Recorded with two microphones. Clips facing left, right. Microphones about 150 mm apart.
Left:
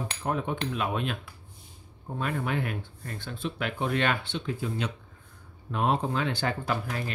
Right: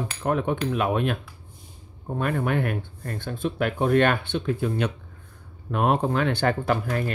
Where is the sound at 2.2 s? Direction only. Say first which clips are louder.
Right 5 dB; 55° right (ahead or behind).